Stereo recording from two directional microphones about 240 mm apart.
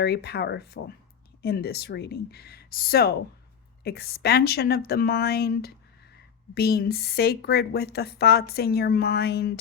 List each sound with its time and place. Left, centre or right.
0.0 s a woman's voice: left